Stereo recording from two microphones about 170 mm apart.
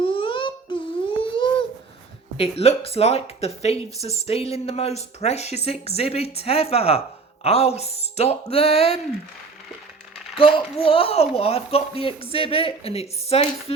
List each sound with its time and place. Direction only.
0.0 s a sound: 30° left (ahead or behind)
2.4 s speech: 35° left (ahead or behind)
10.3 s speech: 30° left (ahead or behind)